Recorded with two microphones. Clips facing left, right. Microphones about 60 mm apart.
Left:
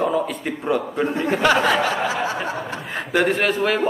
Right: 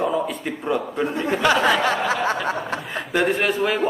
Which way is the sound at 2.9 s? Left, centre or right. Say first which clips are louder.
Left 2 dB; centre.